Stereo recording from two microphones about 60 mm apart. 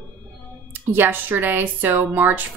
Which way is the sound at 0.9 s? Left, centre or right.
Right.